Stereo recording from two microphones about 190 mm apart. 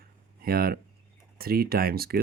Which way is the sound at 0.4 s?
50° right (ahead or behind).